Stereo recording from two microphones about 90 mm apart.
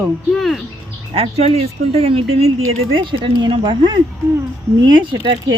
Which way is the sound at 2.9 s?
65° right (ahead or behind).